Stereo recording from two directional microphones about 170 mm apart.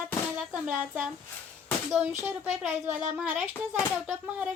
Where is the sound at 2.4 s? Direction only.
Centre (ahead or behind).